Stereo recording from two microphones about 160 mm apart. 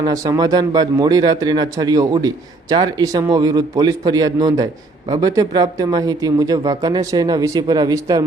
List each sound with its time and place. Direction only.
0.0 s speech: 25° right (ahead or behind)